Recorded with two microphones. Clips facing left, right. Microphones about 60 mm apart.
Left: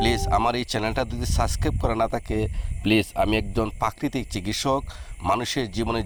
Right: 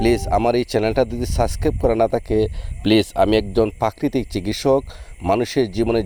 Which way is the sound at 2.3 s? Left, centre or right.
Right.